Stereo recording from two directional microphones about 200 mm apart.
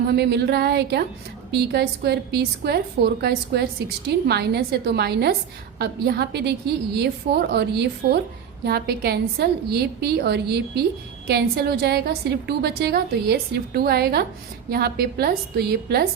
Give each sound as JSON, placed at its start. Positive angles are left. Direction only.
{"t": 0.1, "sound": "a woman's voice", "side_deg": -55}